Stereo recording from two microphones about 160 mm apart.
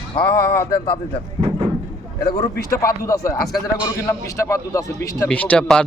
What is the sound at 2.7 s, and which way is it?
A man's voice, 20° left (ahead or behind).